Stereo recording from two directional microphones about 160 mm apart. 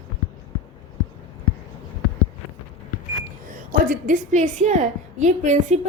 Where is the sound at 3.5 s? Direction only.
55° right (ahead or behind).